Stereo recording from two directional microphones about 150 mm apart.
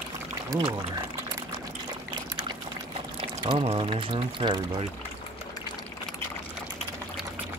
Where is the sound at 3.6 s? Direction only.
35° right (ahead or behind).